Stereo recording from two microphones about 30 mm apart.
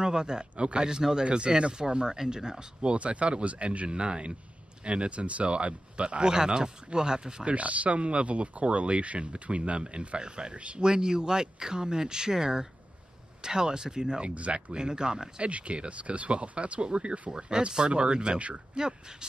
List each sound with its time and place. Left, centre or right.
0.0 s speech: right
1.2 s speech: right
2.8 s speech: right
6.3 s speech: right
7.4 s speech: right
10.5 s speech: right
10.8 s speech: right
14.2 s speech: right
14.5 s speech: right
15.4 s speech: right